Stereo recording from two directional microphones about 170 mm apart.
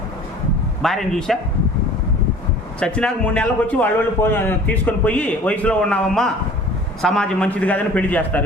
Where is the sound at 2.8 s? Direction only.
5° left (ahead or behind).